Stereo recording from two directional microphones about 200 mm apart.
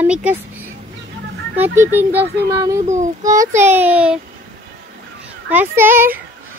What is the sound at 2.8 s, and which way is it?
Speech, 35° right (ahead or behind).